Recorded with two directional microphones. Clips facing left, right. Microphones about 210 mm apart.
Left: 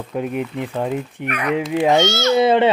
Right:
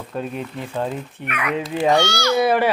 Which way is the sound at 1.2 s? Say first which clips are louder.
Left 3 dB; 35° left (ahead or behind).